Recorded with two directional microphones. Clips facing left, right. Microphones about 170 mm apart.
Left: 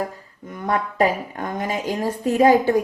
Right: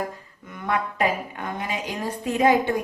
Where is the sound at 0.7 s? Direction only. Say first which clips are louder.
Left 4 dB; 40° left (ahead or behind).